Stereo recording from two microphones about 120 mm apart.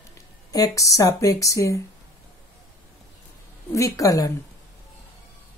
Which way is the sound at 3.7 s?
25° left (ahead or behind).